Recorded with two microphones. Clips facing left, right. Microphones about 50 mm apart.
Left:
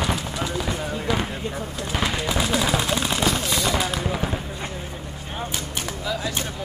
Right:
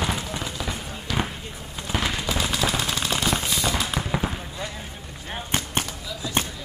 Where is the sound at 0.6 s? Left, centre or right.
Centre.